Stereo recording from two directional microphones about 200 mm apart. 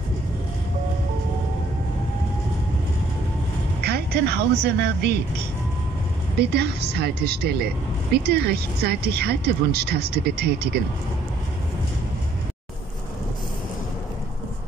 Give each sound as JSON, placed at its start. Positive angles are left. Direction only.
{"t": 3.8, "sound": "a woman's voice", "side_deg": -55}
{"t": 6.5, "sound": "speech", "side_deg": -55}